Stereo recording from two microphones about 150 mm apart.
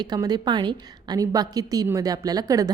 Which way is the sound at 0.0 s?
25° right (ahead or behind).